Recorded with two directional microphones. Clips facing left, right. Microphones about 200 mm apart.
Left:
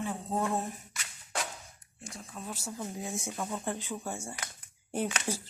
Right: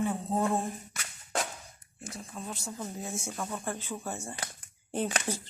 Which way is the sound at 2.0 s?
Centre (ahead or behind).